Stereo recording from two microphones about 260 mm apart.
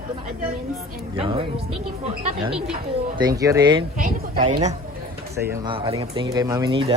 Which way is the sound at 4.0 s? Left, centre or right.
Right.